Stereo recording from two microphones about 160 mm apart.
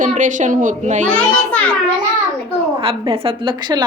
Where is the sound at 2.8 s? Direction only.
35° right (ahead or behind).